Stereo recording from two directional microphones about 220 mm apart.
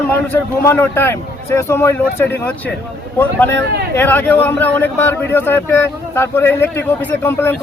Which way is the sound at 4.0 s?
10° left (ahead or behind).